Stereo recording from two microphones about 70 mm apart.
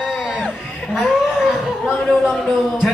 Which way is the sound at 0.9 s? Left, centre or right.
Centre.